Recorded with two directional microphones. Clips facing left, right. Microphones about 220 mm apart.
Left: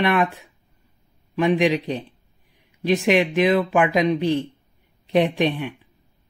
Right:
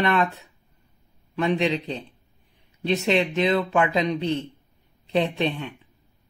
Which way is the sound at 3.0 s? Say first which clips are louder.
Left 4 dB; 10° left (ahead or behind).